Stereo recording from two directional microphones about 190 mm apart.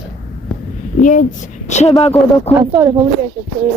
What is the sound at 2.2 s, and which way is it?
Speech, centre (ahead or behind).